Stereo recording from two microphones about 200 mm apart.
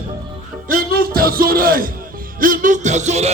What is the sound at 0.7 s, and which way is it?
Music, 45° right (ahead or behind).